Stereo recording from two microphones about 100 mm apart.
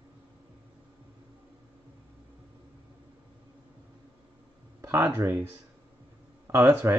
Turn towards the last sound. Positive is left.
turn(degrees=-30)  # may be behind; listen again after turning